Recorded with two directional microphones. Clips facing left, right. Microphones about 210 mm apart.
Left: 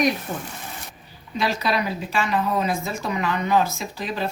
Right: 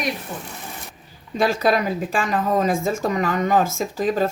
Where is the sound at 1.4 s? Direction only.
50° right (ahead or behind).